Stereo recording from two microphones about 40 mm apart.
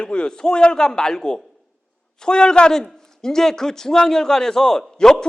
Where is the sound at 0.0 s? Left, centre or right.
Left.